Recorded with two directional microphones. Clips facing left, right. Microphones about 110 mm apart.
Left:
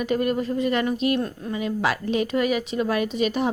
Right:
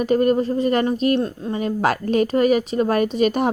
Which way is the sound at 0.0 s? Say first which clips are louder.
Right 6 dB; 40° right (ahead or behind).